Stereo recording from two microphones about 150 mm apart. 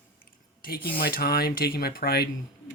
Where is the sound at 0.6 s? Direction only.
90° left.